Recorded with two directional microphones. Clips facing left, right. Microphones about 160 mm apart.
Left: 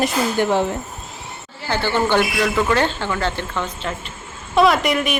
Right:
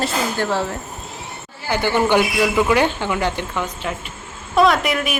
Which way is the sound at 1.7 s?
15° right (ahead or behind).